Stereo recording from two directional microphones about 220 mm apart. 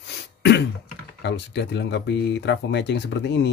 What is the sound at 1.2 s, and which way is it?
Speech, 50° left (ahead or behind).